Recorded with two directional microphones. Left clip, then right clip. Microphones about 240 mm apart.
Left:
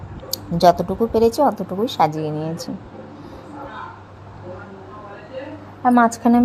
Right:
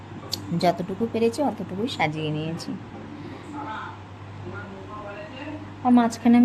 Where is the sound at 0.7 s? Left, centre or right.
Centre.